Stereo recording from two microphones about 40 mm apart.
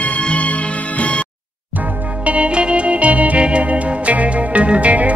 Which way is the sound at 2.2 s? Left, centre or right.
Right.